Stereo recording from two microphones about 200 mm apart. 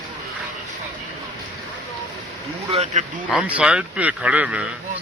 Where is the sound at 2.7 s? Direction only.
30° right (ahead or behind).